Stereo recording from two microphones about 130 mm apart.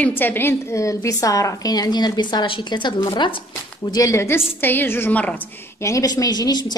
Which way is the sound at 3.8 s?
25° left (ahead or behind).